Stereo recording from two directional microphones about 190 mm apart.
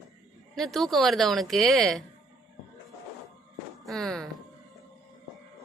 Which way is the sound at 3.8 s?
Centre (ahead or behind).